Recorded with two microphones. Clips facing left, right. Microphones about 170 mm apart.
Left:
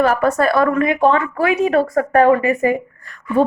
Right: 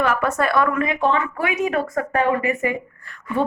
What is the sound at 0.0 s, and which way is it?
Speech, 40° left (ahead or behind).